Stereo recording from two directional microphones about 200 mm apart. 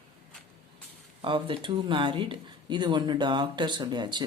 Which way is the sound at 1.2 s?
25° right (ahead or behind).